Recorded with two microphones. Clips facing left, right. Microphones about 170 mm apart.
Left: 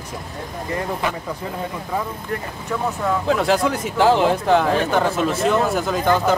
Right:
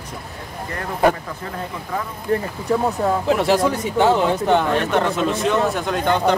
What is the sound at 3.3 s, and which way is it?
Speech, centre (ahead or behind).